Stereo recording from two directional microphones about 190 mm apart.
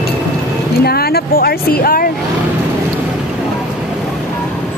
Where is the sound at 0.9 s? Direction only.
55° left (ahead or behind).